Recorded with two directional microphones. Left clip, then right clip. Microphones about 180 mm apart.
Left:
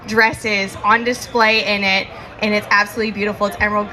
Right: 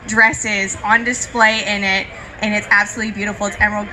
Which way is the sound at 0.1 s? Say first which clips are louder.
Right 1 dB; 45° left (ahead or behind).